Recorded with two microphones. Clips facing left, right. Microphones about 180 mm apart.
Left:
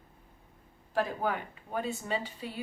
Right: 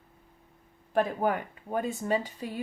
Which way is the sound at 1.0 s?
50° right (ahead or behind).